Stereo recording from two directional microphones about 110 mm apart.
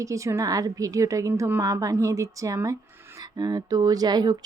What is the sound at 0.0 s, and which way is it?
Speech, 30° right (ahead or behind).